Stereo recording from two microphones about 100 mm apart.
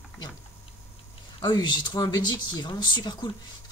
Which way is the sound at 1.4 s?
50° left (ahead or behind).